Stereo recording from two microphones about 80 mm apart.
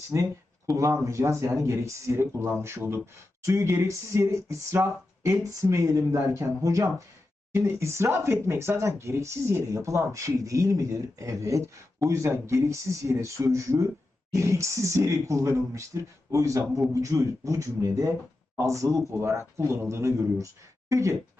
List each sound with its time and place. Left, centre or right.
0.1 s speech: right